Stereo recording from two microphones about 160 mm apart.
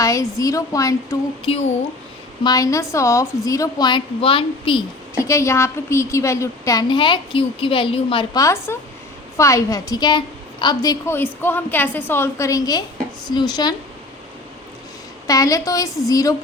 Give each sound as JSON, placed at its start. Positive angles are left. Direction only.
{"t": 0.0, "sound": "a woman's voice", "side_deg": 20}
{"t": 2.4, "sound": "a woman's voice", "side_deg": 25}
{"t": 5.1, "sound": "a woman's voice", "side_deg": 20}
{"t": 15.3, "sound": "a woman's voice", "side_deg": 20}